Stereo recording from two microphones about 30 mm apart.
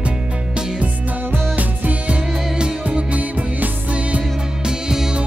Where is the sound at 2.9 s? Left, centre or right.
Right.